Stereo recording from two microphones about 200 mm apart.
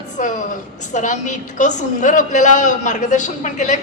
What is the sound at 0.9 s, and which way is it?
A woman's voice, 40° left (ahead or behind).